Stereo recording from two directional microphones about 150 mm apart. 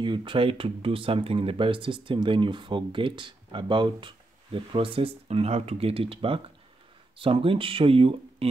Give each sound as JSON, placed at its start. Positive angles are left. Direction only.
{"t": 0.0, "sound": "speech", "side_deg": -35}